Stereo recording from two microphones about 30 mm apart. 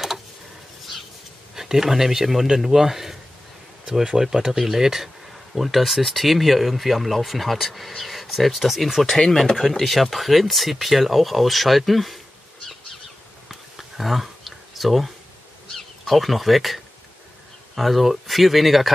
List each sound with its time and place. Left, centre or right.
1.5 s speech: centre
3.8 s speech: right
4.2 s speech: centre
5.5 s speech: centre
13.5 s a sound: centre
16.1 s speech: centre